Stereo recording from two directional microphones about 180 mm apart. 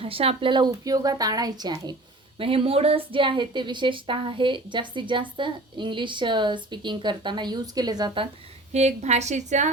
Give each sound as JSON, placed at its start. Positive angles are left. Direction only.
{"t": 0.0, "sound": "a woman's voice", "side_deg": -30}
{"t": 8.7, "sound": "a woman's voice", "side_deg": -40}